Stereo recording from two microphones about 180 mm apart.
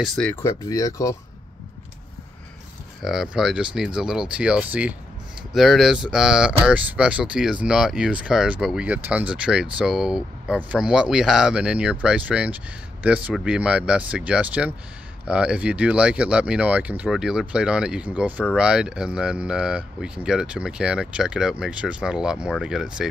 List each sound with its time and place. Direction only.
0.0 s speech: 5° left (ahead or behind)
3.0 s speech: centre (ahead or behind)